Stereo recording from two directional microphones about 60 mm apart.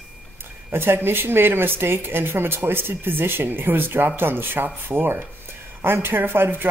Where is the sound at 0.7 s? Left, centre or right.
Right.